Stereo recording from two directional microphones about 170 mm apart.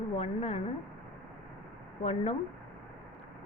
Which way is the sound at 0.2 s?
35° left (ahead or behind).